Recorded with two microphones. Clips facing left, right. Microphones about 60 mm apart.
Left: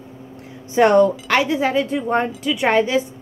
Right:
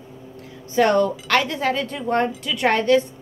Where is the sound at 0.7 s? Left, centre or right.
Left.